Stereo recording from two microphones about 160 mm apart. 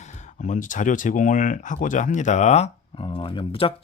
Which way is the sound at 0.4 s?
50° left (ahead or behind).